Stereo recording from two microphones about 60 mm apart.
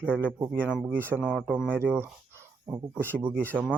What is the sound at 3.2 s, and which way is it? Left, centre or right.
Speech, right.